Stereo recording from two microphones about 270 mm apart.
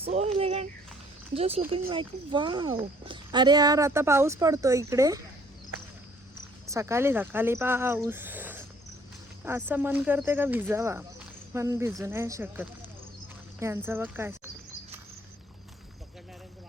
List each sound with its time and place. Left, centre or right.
0.0 s a sound: right
1.3 s speech: right
6.7 s speech: centre